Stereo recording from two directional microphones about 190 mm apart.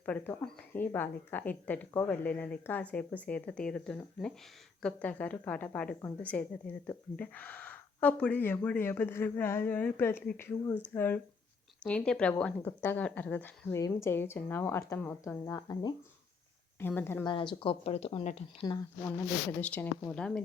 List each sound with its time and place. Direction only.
0.0 s a woman's voice: 5° left (ahead or behind)
17.2 s speech: 25° left (ahead or behind)
18.6 s a woman's voice: 15° left (ahead or behind)